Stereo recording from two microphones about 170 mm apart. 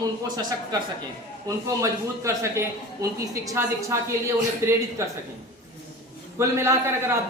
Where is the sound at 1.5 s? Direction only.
20° right (ahead or behind).